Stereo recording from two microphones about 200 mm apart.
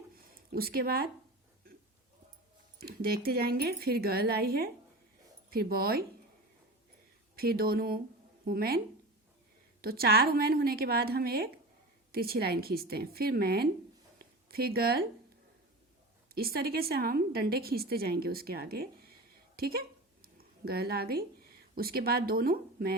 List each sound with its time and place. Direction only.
0.2 s a sound: 50° right (ahead or behind)
2.8 s a woman's voice: 50° right (ahead or behind)
7.3 s a woman's voice: 50° right (ahead or behind)
9.8 s a woman's voice: 50° right (ahead or behind)
16.3 s a woman's voice: 50° right (ahead or behind)
20.2 s a sound: 50° right (ahead or behind)
21.8 s a woman's voice: 50° right (ahead or behind)